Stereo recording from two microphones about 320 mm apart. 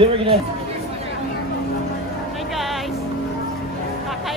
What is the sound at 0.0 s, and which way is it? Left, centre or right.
Speech, centre.